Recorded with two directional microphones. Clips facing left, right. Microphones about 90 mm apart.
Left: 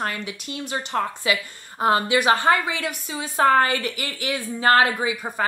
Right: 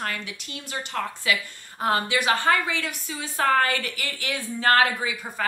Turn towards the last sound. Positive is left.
turn(degrees=20)  # may be behind; listen again after turning